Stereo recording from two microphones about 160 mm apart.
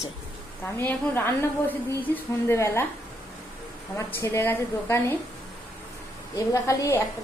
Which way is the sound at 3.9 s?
15° left (ahead or behind).